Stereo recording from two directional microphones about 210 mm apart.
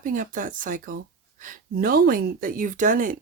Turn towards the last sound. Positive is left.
turn(degrees=-40)  # may be behind; listen again after turning